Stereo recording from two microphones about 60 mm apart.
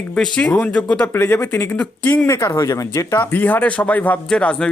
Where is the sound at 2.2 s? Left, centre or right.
Left.